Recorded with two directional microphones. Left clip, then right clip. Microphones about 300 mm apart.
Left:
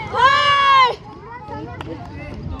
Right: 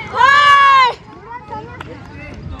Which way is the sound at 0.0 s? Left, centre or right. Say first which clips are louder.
Right 4 dB; left.